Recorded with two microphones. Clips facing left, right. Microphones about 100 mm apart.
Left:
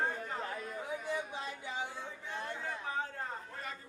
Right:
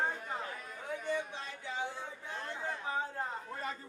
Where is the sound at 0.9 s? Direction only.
10° left (ahead or behind).